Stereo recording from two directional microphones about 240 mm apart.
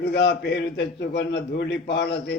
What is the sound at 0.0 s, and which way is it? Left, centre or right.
A man's voice, left.